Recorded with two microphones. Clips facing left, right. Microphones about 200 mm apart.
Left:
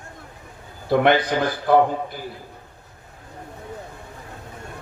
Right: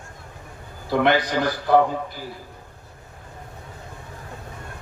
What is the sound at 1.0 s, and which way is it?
Speech, 55° left (ahead or behind).